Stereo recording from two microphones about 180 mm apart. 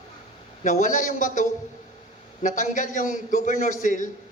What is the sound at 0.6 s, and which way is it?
A man's voice, 45° left (ahead or behind).